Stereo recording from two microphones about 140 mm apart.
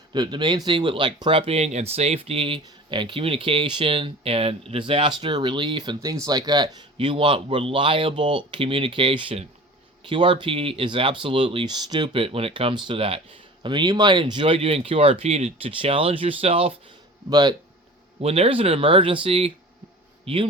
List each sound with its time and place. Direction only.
0.1 s speech: 35° right (ahead or behind)
17.2 s speech: 30° right (ahead or behind)
18.2 s speech: 45° right (ahead or behind)